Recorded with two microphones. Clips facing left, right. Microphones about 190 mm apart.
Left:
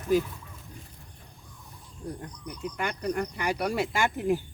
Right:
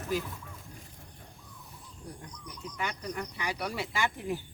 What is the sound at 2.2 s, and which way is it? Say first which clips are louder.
Speech: left 7 dB; 55° left (ahead or behind).